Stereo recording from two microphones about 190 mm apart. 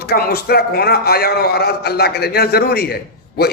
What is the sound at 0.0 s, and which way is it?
A man's voice, 55° left (ahead or behind).